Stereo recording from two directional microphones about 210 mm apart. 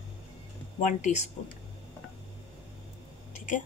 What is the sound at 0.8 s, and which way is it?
Speech, 35° left (ahead or behind).